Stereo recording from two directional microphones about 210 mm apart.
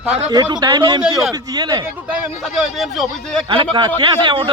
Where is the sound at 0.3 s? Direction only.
20° right (ahead or behind).